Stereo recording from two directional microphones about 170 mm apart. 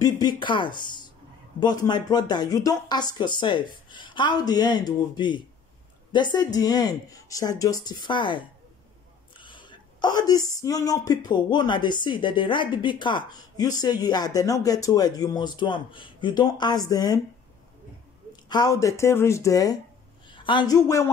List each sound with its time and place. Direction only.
0.0 s speech: 25° left (ahead or behind)
9.4 s a sound: 30° left (ahead or behind)
10.5 s speech: 20° left (ahead or behind)
18.3 s a man's voice: 25° left (ahead or behind)